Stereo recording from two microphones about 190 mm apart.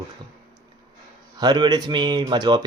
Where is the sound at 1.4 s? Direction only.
25° right (ahead or behind).